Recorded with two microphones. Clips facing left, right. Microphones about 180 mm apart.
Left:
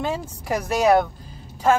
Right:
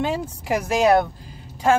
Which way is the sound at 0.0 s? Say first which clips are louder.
Right 2 dB; 15° right (ahead or behind).